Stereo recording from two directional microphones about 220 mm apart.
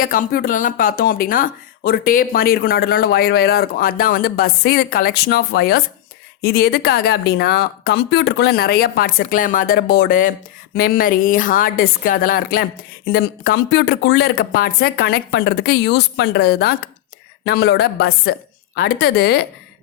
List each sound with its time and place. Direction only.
0.0 s a woman's voice: 40° left (ahead or behind)